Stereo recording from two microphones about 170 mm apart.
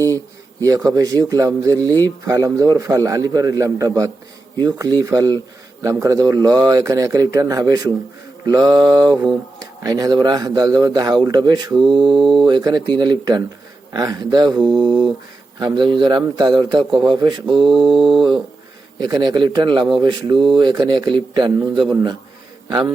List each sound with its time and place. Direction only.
0.6 s speech: 20° right (ahead or behind)